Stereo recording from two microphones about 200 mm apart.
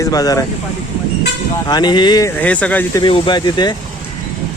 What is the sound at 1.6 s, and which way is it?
Speech, 20° left (ahead or behind).